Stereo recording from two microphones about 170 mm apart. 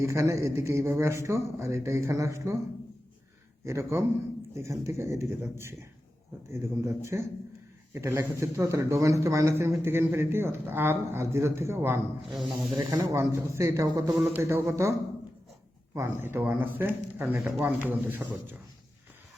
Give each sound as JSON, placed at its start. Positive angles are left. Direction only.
{"t": 0.0, "sound": "speech", "side_deg": -15}
{"t": 3.6, "sound": "speech", "side_deg": -15}
{"t": 12.3, "sound": "speech", "side_deg": 0}
{"t": 12.9, "sound": "speech", "side_deg": -15}
{"t": 16.2, "sound": "speech", "side_deg": -15}